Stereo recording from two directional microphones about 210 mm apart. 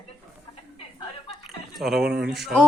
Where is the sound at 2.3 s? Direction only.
Centre (ahead or behind).